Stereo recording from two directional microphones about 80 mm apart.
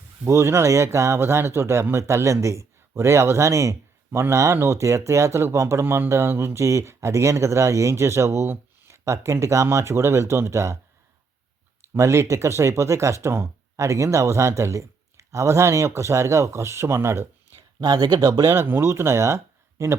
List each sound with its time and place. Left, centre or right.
0.3 s speech: right
11.9 s speech: right
17.7 s speech: right
18.5 s speech: right